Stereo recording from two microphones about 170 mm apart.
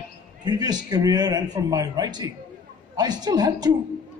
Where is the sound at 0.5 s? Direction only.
25° right (ahead or behind).